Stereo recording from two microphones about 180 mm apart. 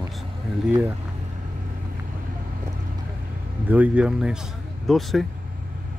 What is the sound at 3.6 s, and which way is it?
Speech, 10° right (ahead or behind).